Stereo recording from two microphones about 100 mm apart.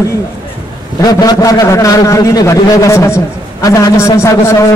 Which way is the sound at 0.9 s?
40° left (ahead or behind).